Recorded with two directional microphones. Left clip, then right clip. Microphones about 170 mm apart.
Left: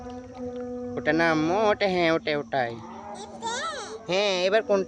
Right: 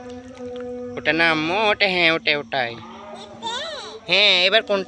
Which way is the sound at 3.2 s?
20° left (ahead or behind).